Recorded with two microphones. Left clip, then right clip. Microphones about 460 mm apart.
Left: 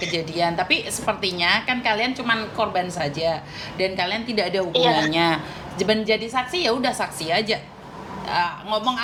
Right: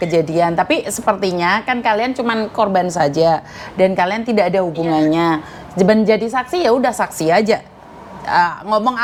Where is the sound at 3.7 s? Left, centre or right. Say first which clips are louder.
Right 9 dB; right.